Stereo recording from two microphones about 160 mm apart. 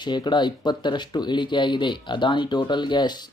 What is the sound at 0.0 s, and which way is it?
Speech, 30° left (ahead or behind).